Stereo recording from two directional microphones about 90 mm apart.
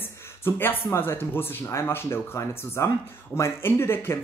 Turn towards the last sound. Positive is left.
turn(degrees=25)  # may be behind; listen again after turning